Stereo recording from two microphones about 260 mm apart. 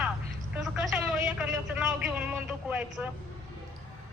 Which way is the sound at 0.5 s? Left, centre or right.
Centre.